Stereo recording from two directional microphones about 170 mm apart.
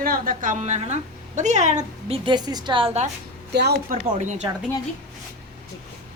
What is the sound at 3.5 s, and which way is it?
Speech, 75° right (ahead or behind).